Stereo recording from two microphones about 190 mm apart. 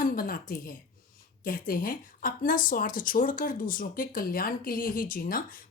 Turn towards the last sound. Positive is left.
turn(degrees=50)  # may be behind; listen again after turning